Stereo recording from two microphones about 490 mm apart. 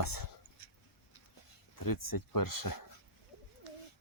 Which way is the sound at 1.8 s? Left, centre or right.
Left.